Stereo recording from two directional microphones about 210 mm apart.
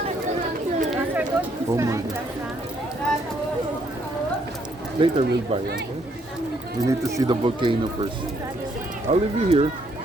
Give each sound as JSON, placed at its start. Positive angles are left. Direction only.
{"t": 0.9, "sound": "a sound", "side_deg": -10}
{"t": 4.9, "sound": "speech", "side_deg": -25}
{"t": 6.8, "sound": "speech", "side_deg": -20}
{"t": 9.0, "sound": "speech", "side_deg": -30}